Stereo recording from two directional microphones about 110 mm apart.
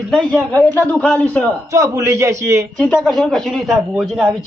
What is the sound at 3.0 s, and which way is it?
Speech, 5° left (ahead or behind).